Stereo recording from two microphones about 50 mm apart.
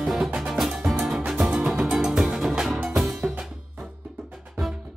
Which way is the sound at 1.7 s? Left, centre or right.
Centre.